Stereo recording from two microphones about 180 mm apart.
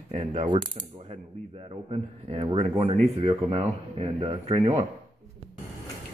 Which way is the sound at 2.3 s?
35° right (ahead or behind).